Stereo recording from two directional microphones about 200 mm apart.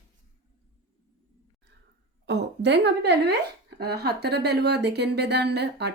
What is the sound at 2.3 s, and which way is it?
A woman's voice, 60° right (ahead or behind).